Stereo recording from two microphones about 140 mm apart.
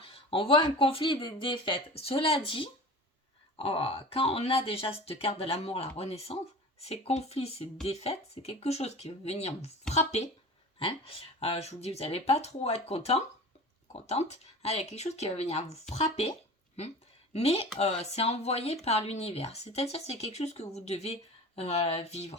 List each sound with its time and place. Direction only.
0.0 s speech: 40° left (ahead or behind)
17.3 s speech: 45° left (ahead or behind)